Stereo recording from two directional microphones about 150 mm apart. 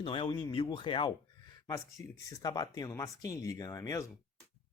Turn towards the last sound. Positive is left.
turn(degrees=20)  # may be behind; listen again after turning